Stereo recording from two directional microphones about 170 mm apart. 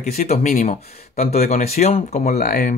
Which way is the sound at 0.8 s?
65° left (ahead or behind).